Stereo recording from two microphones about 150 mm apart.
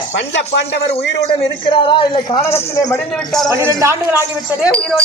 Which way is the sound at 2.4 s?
15° left (ahead or behind).